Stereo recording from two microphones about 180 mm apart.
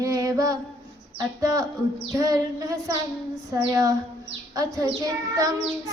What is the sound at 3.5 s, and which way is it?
Child singing, 20° right (ahead or behind).